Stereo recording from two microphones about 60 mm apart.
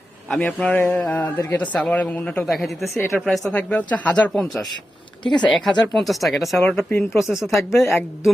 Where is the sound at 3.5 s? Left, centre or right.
Left.